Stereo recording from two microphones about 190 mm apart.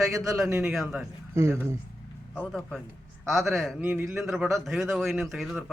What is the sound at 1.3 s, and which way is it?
Speech, 15° right (ahead or behind).